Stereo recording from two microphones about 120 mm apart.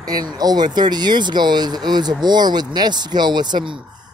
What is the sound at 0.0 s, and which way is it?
Speech, 35° right (ahead or behind).